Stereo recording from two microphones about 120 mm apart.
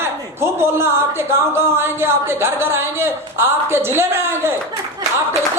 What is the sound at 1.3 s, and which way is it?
Speech, 20° right (ahead or behind).